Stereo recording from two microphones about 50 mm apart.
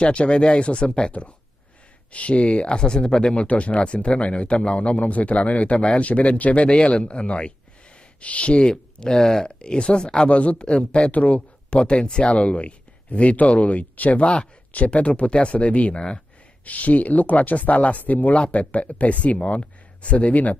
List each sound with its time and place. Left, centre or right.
0.0 s speech: left
16.6 s speech: left